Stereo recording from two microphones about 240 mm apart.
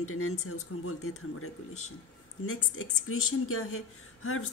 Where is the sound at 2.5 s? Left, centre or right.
Left.